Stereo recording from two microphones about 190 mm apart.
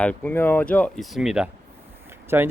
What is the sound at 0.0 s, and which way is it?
Speech, 5° left (ahead or behind).